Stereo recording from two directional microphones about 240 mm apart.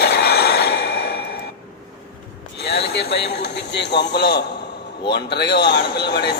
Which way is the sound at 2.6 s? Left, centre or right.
Left.